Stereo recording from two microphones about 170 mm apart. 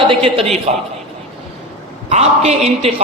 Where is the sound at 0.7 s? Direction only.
45° right (ahead or behind).